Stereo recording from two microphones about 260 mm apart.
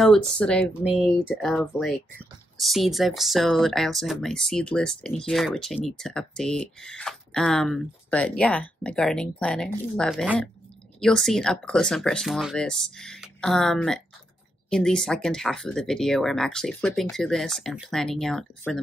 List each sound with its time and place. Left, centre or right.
0.0 s speech: centre